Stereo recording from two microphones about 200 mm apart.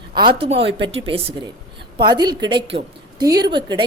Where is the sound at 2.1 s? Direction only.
20° right (ahead or behind).